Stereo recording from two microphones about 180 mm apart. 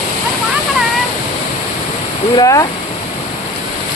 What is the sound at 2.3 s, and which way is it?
Speech, 20° left (ahead or behind).